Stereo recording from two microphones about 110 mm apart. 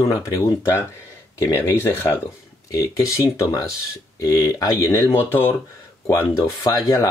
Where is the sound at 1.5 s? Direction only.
20° left (ahead or behind).